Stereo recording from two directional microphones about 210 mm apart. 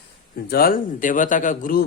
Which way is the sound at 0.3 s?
45° left (ahead or behind).